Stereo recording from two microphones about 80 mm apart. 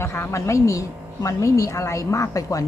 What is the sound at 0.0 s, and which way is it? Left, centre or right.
Speech, left.